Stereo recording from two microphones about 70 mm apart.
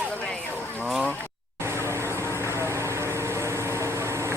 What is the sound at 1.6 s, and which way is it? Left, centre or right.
Vehicle, right.